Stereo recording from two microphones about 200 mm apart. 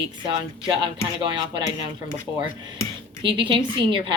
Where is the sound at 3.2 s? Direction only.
25° right (ahead or behind).